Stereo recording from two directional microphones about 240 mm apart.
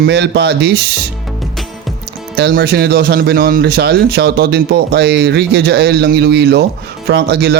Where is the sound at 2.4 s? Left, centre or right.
Right.